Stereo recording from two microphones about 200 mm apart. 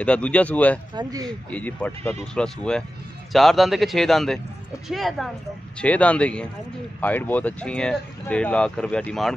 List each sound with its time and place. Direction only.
0.0 s speech: 5° left (ahead or behind)
0.9 s speech: 20° right (ahead or behind)
1.5 s speech: 5° left (ahead or behind)